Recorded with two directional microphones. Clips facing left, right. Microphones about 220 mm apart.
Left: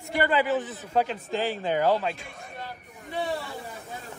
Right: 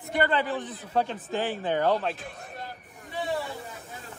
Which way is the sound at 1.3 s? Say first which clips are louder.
Left 1 dB; 90° left.